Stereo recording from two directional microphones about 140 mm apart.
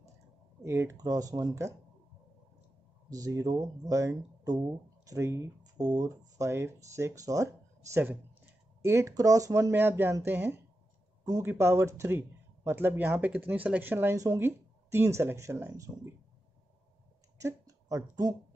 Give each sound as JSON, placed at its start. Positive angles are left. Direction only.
{"t": 0.6, "sound": "speech", "side_deg": -20}
{"t": 3.1, "sound": "speech", "side_deg": -25}
{"t": 17.4, "sound": "a sound", "side_deg": -20}